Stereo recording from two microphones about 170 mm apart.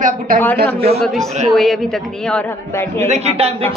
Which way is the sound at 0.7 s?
35° right (ahead or behind).